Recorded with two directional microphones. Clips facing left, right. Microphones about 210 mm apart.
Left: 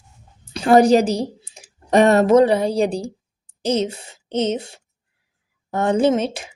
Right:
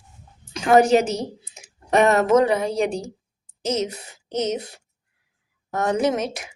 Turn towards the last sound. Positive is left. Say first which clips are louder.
# left 4 dB
turn(degrees=30)  # may be behind; listen again after turning